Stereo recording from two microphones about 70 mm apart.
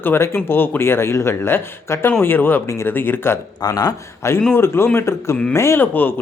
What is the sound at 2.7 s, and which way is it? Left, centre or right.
Speech, left.